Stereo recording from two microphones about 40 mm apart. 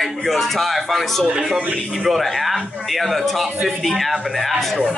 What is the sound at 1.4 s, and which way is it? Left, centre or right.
Speech, centre.